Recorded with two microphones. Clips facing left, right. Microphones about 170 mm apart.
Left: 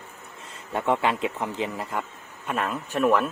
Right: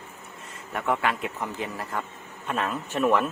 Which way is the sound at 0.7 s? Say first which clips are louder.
Left 3 dB; 25° left (ahead or behind).